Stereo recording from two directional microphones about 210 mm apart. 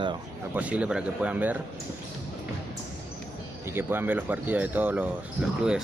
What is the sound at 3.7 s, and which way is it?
Speech, 10° right (ahead or behind).